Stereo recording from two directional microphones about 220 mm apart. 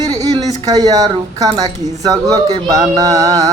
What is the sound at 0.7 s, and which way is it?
Speech, 15° right (ahead or behind).